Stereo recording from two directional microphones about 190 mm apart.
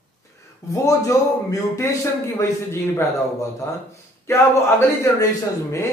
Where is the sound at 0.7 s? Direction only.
15° left (ahead or behind).